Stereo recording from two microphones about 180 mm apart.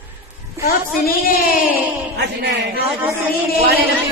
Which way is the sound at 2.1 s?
65° right (ahead or behind).